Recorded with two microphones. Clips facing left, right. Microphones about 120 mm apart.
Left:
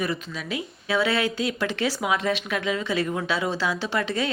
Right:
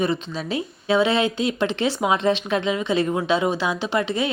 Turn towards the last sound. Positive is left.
turn(degrees=-20)  # may be behind; listen again after turning